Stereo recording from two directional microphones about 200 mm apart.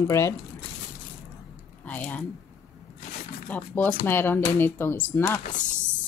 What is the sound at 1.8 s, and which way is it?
Speech, 10° left (ahead or behind).